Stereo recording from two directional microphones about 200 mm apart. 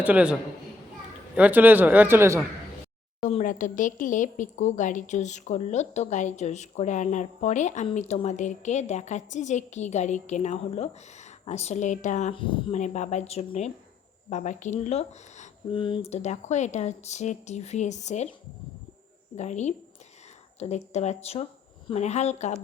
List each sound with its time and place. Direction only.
0.0 s speech: 5° right (ahead or behind)
1.4 s speech: 10° right (ahead or behind)
3.2 s a woman's voice: 40° left (ahead or behind)
19.4 s a woman's voice: 35° left (ahead or behind)